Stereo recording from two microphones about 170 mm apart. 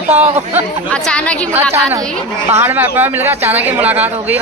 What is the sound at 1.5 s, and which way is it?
Speech, 15° right (ahead or behind).